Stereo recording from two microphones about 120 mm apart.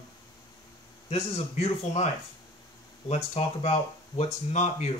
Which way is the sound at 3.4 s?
60° left (ahead or behind).